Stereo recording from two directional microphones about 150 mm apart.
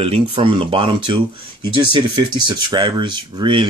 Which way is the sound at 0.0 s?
40° right (ahead or behind).